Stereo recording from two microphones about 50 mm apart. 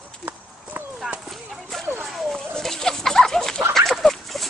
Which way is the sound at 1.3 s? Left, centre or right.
Centre.